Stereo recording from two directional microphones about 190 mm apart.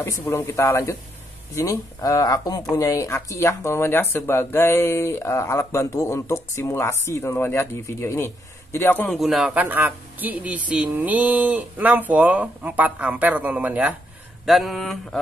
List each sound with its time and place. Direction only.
0.0 s speech: 15° left (ahead or behind)
9.2 s speech: centre (ahead or behind)
14.4 s mantra: centre (ahead or behind)